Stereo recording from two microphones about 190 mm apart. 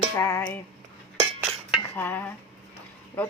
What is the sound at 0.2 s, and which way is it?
Speech, 15° left (ahead or behind).